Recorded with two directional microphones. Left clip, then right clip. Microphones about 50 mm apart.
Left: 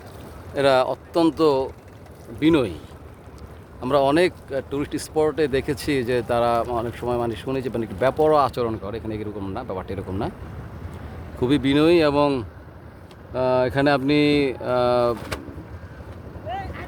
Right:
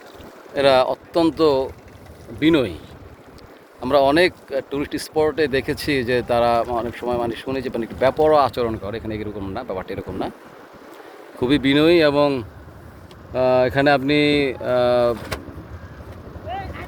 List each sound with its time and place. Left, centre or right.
0.5 s speech: left
3.9 s speech: left
11.3 s speech: centre
11.8 s speech: left
12.1 s speech: left
13.3 s speech: left
14.1 s speech: left
16.5 s boat: left